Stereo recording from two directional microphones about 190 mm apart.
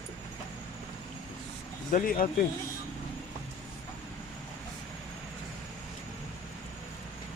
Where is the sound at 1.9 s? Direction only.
45° left (ahead or behind).